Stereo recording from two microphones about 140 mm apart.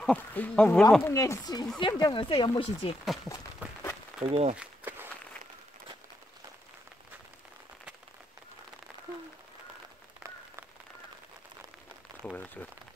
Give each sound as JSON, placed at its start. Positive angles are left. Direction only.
{"t": 0.0, "sound": "speech", "side_deg": 10}
{"t": 1.0, "sound": "speech", "side_deg": 20}
{"t": 2.6, "sound": "speech", "side_deg": 45}
{"t": 3.3, "sound": "a sound", "side_deg": 0}
{"t": 4.2, "sound": "speech", "side_deg": -45}
{"t": 4.6, "sound": "walk", "side_deg": -15}
{"t": 12.2, "sound": "speech", "side_deg": 10}